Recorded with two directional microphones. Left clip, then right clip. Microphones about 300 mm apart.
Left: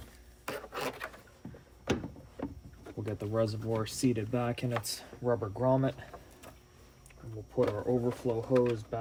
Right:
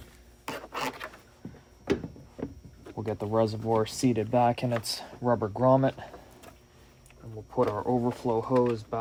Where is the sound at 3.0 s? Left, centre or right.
Right.